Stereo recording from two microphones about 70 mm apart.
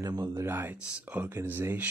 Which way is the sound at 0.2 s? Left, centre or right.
Right.